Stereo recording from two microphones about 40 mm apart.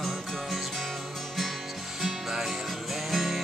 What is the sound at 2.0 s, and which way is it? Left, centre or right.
Music, centre.